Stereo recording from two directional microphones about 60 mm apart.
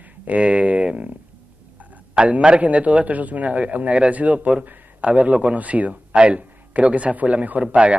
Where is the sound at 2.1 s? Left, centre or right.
Centre.